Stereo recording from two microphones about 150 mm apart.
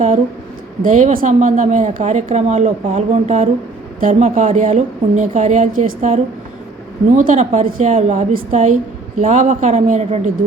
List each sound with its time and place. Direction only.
0.8 s a woman's voice: 60° right (ahead or behind)
8.3 s a woman's voice: 65° right (ahead or behind)